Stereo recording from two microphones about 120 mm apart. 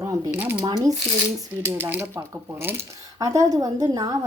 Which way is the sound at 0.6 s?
35° right (ahead or behind).